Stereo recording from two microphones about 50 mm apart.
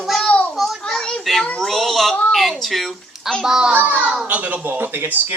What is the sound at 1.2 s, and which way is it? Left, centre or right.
A child's voice, centre.